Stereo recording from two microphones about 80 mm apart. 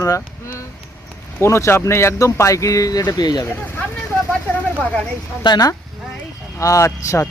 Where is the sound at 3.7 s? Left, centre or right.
Left.